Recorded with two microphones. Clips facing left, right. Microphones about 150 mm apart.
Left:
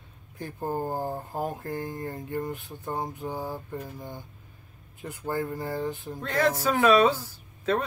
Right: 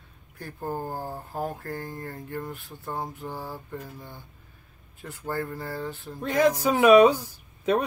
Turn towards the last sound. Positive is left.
turn(degrees=-15)  # may be behind; listen again after turning